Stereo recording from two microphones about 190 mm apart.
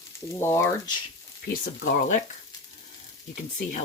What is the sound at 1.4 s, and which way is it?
Speech, 50° left (ahead or behind).